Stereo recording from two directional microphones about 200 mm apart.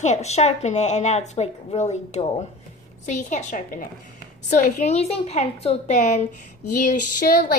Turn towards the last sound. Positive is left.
turn(degrees=45)  # may be behind; listen again after turning